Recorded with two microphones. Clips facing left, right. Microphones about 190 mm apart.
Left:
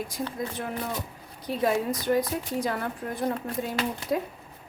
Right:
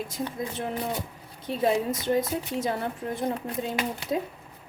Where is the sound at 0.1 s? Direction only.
25° right (ahead or behind).